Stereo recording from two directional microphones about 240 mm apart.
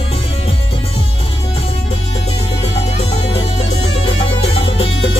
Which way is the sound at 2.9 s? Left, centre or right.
Left.